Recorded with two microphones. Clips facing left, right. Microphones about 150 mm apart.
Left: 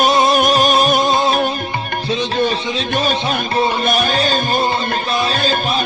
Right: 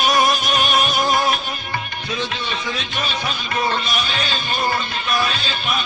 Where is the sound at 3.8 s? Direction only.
50° left (ahead or behind).